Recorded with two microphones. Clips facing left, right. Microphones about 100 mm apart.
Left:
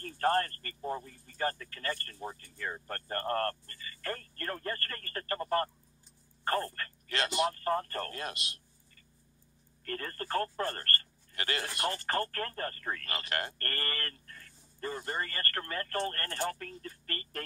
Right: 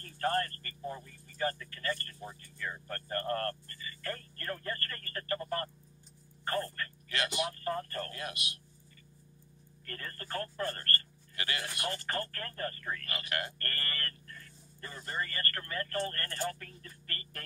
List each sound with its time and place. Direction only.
0.0 s speech: 35° left (ahead or behind)
9.8 s speech: 40° left (ahead or behind)